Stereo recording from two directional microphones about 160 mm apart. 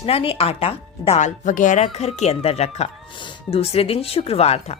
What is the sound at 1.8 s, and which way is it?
Speech, 40° left (ahead or behind).